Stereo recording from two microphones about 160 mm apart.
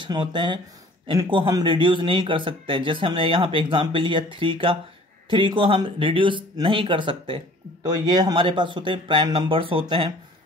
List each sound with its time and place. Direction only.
0.0 s speech: 30° right (ahead or behind)